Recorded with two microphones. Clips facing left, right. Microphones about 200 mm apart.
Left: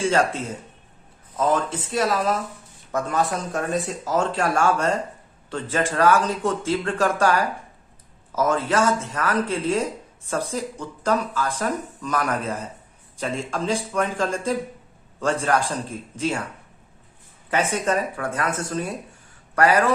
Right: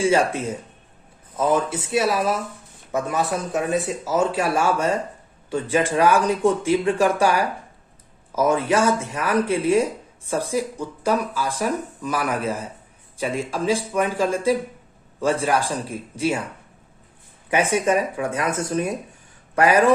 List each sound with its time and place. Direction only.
0.0 s speech: 10° right (ahead or behind)
17.5 s speech: 15° right (ahead or behind)